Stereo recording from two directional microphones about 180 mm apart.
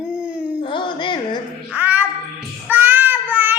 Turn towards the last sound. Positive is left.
turn(degrees=-10)  # may be behind; listen again after turning